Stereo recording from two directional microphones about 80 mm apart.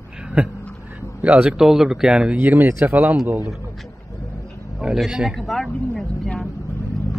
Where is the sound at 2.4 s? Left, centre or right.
Right.